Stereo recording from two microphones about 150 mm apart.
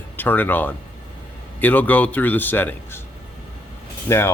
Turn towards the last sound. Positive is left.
turn(degrees=15)  # may be behind; listen again after turning